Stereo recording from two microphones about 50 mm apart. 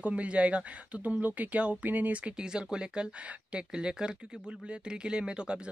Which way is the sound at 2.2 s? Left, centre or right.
Centre.